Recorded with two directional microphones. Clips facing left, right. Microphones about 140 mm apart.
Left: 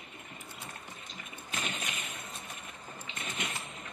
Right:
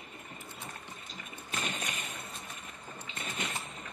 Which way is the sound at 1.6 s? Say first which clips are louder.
Right 1 dB; 40° right (ahead or behind).